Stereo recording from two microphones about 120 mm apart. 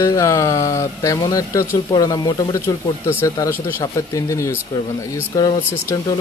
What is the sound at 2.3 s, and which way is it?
Speech, 30° left (ahead or behind).